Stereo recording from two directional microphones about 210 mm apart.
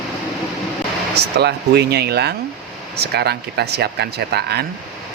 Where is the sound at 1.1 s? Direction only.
50° right (ahead or behind).